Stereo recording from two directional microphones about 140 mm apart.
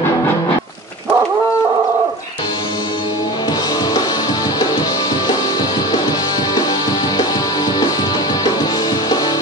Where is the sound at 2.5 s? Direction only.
30° left (ahead or behind).